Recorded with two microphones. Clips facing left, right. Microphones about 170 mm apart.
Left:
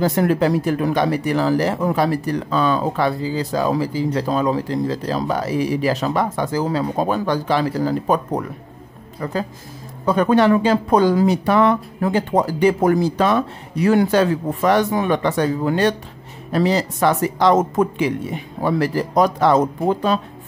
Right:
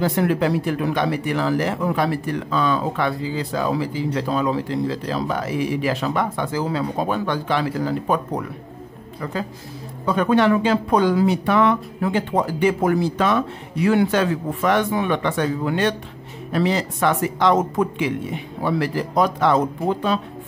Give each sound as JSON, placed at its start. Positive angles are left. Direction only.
{"t": 0.0, "sound": "speech", "side_deg": 40}